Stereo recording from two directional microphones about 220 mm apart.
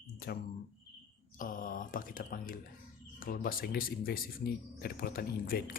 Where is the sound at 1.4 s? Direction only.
40° left (ahead or behind).